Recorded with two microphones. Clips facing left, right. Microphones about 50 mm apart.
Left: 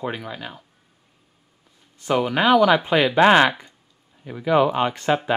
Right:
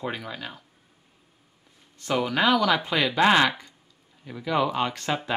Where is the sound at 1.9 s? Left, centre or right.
Centre.